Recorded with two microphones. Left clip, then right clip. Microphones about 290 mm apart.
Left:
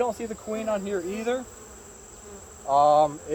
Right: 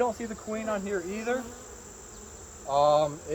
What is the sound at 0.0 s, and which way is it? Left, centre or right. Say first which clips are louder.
Speech: left 2 dB; left.